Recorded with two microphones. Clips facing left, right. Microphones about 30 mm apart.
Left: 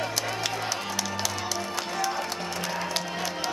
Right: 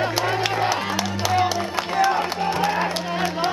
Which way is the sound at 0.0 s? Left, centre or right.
Right.